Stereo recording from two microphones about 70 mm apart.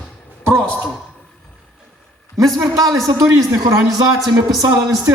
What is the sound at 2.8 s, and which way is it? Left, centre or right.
A man's voice, right.